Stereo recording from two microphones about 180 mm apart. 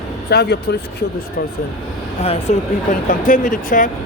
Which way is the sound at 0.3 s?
65° left (ahead or behind).